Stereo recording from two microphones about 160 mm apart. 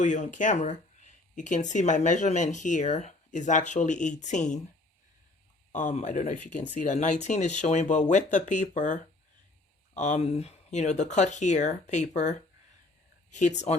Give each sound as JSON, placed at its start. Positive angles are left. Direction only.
{"t": 0.0, "sound": "speech", "side_deg": 50}
{"t": 5.7, "sound": "speech", "side_deg": 45}